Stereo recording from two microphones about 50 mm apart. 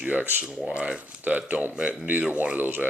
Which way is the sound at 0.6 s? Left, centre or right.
Right.